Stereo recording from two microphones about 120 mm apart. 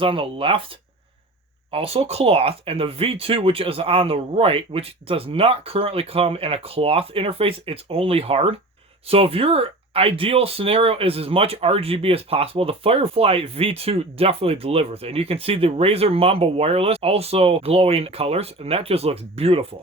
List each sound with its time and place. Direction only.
0.0 s speech: 50° right (ahead or behind)
1.7 s speech: 50° right (ahead or behind)